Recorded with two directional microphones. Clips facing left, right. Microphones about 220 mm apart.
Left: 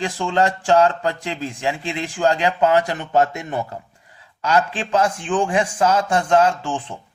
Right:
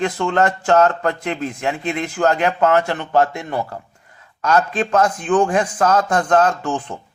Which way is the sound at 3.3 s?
20° left (ahead or behind).